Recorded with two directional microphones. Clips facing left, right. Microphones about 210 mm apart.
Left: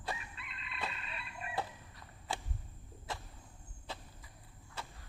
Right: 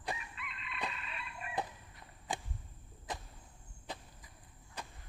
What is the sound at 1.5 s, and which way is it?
Chicken, 20° right (ahead or behind).